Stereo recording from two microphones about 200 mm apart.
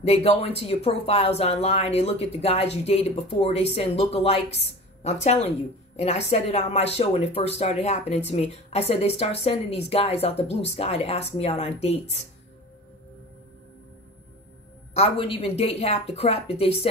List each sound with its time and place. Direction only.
0.0 s speech: 30° left (ahead or behind)
15.0 s a woman's voice: 25° left (ahead or behind)